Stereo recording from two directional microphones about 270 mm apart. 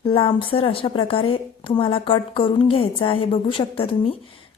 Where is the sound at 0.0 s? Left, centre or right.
Centre.